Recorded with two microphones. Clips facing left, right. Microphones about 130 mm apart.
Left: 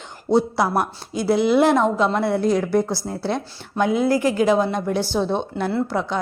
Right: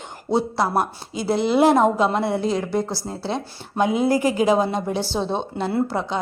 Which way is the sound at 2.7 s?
20° right (ahead or behind).